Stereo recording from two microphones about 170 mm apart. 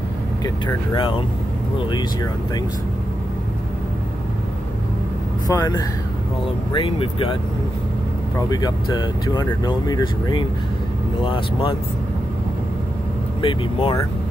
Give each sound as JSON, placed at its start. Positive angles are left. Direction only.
{"t": 0.9, "sound": "speech", "side_deg": 30}
{"t": 5.5, "sound": "speech", "side_deg": 20}
{"t": 8.4, "sound": "speech", "side_deg": 20}
{"t": 13.4, "sound": "speech", "side_deg": 30}